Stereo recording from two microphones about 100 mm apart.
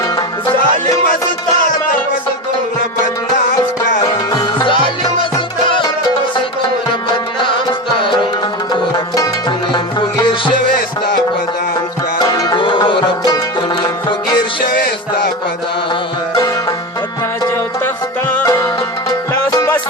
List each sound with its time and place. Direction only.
4.3 s music: 45° left (ahead or behind)
7.7 s music: 55° left (ahead or behind)
8.7 s music: 35° left (ahead or behind)
12.3 s music: 40° left (ahead or behind)
12.5 s music: 55° left (ahead or behind)
17.8 s music: 15° left (ahead or behind)
18.4 s music: 30° left (ahead or behind)